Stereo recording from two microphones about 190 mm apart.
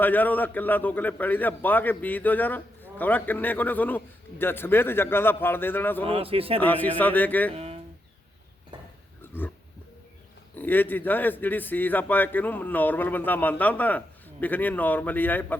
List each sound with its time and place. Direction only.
0.0 s a man's voice: 10° left (ahead or behind)
6.1 s a man's voice: 30° right (ahead or behind)
6.6 s a man's voice: 10° left (ahead or behind)
7.5 s speech: 35° right (ahead or behind)
10.5 s a man's voice: 10° left (ahead or behind)